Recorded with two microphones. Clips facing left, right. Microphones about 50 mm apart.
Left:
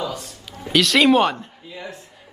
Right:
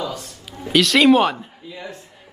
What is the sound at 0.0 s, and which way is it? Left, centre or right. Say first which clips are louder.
A man's voice: even; centre.